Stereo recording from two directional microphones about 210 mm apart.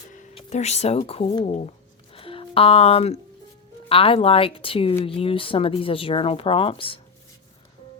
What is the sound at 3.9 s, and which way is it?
Speech, 25° left (ahead or behind).